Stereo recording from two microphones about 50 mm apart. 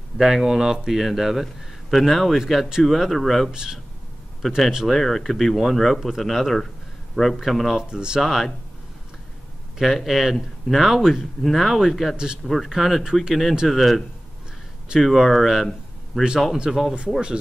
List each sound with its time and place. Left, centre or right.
0.2 s a man's voice: centre
3.5 s speech: centre
4.9 s a man's voice: centre
7.7 s speech: centre
8.2 s a man's voice: centre
9.8 s a man's voice: centre
11.4 s a man's voice: centre